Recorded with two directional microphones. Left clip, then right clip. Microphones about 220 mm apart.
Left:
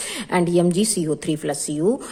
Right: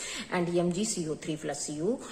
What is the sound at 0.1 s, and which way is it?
A woman's voice, 45° left (ahead or behind).